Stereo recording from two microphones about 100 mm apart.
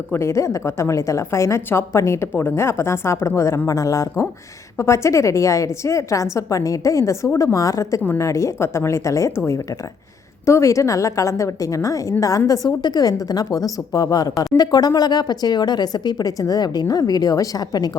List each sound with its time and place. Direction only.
0.1 s a woman's voice: 25° left (ahead or behind)
10.4 s speech: 30° left (ahead or behind)